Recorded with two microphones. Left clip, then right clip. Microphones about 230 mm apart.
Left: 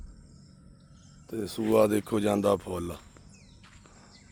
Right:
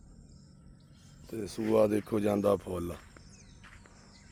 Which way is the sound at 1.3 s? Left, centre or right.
Centre.